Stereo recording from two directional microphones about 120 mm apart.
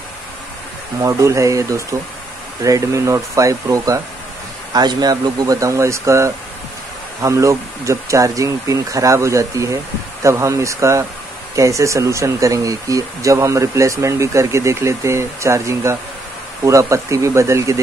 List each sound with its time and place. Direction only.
1.0 s speech: 25° right (ahead or behind)